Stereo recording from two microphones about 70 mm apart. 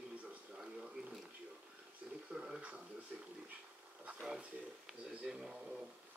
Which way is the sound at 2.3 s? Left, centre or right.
Centre.